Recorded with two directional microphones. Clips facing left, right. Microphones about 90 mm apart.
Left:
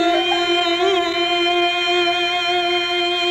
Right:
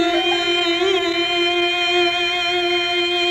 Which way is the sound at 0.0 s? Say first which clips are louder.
Left 1 dB; 40° left (ahead or behind).